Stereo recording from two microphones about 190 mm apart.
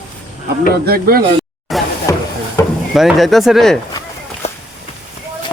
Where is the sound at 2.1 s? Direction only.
15° left (ahead or behind).